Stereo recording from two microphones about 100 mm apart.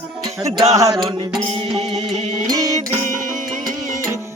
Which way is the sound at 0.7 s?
45° right (ahead or behind).